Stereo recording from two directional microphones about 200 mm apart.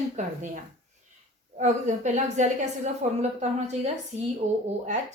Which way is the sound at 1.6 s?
35° right (ahead or behind).